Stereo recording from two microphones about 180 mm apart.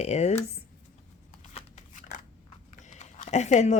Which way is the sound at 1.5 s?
40° left (ahead or behind).